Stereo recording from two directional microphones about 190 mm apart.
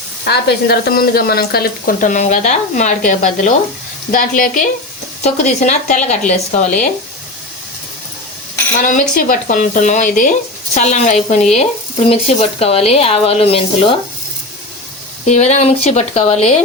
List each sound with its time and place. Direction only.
0.3 s speech: 60° left (ahead or behind); by 6.8 s 40° left (ahead or behind)
8.8 s speech: 45° left (ahead or behind)
15.3 s speech: 35° left (ahead or behind)